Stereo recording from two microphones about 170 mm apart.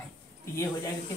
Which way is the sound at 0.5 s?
20° left (ahead or behind).